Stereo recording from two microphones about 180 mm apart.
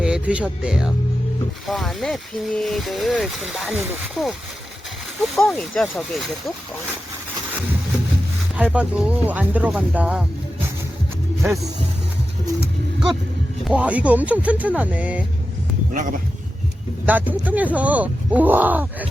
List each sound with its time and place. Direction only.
0.0 s speech: 5° right (ahead or behind)
5.4 s speech: 5° left (ahead or behind)
8.5 s speech: 5° right (ahead or behind)
13.7 s speech: 5° right (ahead or behind)
15.9 s speech: 45° right (ahead or behind)
17.1 s speech: 10° right (ahead or behind)